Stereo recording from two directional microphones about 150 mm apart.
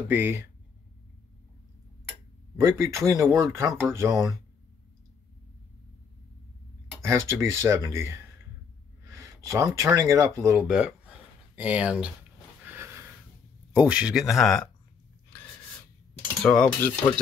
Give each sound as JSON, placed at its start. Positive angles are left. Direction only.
{"t": 0.1, "sound": "speech", "side_deg": -15}
{"t": 2.5, "sound": "speech", "side_deg": -20}
{"t": 7.0, "sound": "speech", "side_deg": -20}
{"t": 10.6, "sound": "speech", "side_deg": -5}
{"t": 12.6, "sound": "sniff", "side_deg": -15}
{"t": 13.7, "sound": "speech", "side_deg": -10}
{"t": 16.4, "sound": "cutlery", "side_deg": 10}